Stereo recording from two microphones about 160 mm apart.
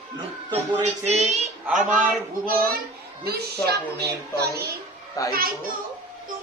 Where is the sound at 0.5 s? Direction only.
45° right (ahead or behind).